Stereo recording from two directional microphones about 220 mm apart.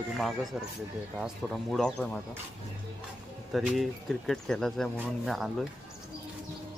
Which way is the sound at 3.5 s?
Centre (ahead or behind).